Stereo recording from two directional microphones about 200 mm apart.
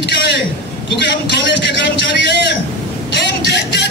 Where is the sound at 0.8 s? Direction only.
60° left (ahead or behind).